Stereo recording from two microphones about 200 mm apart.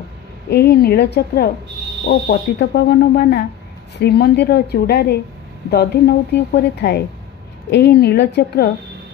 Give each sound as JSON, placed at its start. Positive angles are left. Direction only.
{"t": 0.5, "sound": "a woman's voice", "side_deg": 50}